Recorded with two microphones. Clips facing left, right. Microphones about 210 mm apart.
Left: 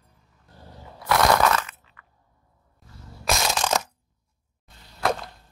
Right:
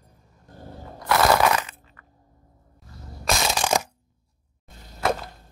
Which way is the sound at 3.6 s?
10° right (ahead or behind).